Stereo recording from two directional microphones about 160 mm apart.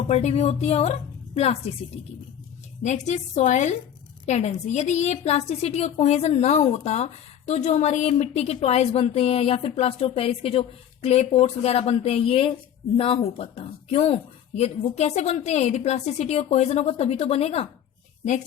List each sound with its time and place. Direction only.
0.1 s a woman's voice: 45° left (ahead or behind)
2.8 s a woman's voice: 50° left (ahead or behind)